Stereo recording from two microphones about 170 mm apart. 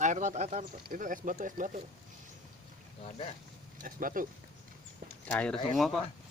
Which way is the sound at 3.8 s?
55° right (ahead or behind).